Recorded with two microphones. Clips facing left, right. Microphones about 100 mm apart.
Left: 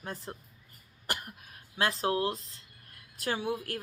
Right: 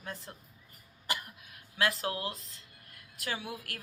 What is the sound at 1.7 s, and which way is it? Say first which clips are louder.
Speech: left 3 dB; 30° left (ahead or behind).